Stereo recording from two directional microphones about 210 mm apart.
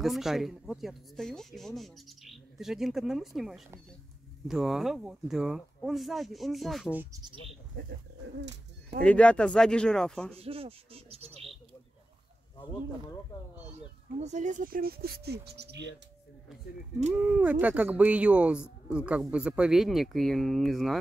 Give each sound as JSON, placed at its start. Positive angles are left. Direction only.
{"t": 0.0, "sound": "speech", "side_deg": 0}
{"t": 7.8, "sound": "speech", "side_deg": -40}
{"t": 8.4, "sound": "bird", "side_deg": -55}
{"t": 9.0, "sound": "speech", "side_deg": 5}
{"t": 10.3, "sound": "speech", "side_deg": -25}
{"t": 13.7, "sound": "speech", "side_deg": -30}
{"t": 17.2, "sound": "speech", "side_deg": -5}